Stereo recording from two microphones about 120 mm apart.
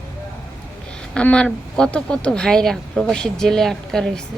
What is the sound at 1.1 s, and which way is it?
Speech, 10° left (ahead or behind).